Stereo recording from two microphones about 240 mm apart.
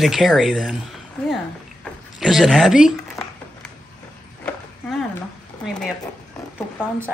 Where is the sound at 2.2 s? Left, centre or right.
Centre.